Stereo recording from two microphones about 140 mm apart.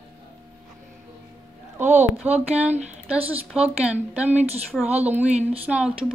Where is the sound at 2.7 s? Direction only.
55° right (ahead or behind).